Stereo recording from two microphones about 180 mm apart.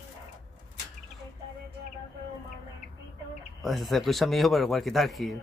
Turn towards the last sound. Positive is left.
turn(degrees=0)  # may be behind; listen again after turning